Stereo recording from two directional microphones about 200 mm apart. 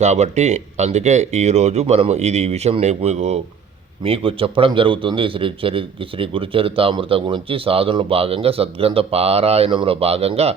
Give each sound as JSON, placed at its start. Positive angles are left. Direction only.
{"t": 0.0, "sound": "a man's voice", "side_deg": -35}